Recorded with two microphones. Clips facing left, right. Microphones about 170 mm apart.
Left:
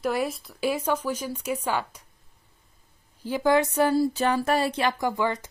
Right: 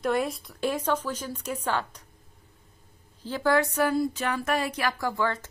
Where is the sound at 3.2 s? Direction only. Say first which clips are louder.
Left 2 dB; 15° left (ahead or behind).